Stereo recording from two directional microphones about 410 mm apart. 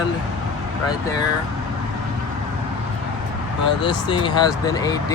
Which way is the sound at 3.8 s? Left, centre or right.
Centre.